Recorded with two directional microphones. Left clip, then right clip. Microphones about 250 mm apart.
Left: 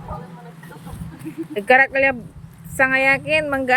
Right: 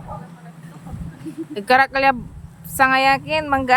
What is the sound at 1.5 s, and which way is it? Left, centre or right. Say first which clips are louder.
A woman's voice: left 1 dB; centre.